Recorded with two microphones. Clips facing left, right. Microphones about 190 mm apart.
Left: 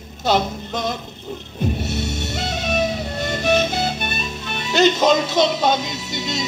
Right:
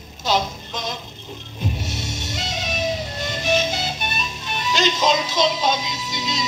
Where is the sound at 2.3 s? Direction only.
60° left (ahead or behind).